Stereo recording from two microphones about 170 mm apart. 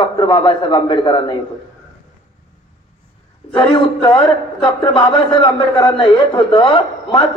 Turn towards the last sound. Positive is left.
turn(degrees=30)  # may be behind; listen again after turning